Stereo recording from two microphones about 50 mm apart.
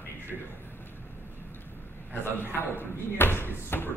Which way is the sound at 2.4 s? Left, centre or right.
Left.